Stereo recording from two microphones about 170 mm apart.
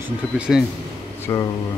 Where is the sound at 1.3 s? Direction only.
15° left (ahead or behind).